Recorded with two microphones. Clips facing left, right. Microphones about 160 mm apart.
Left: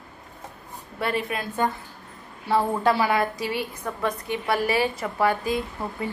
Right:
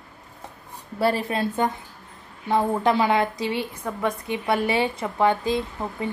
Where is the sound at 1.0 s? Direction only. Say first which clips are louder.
Right 5 dB; 30° right (ahead or behind).